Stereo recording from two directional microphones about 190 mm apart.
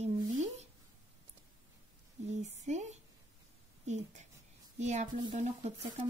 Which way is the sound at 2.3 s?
35° right (ahead or behind).